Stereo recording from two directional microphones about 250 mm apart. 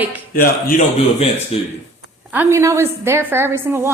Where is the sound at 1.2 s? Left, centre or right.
Left.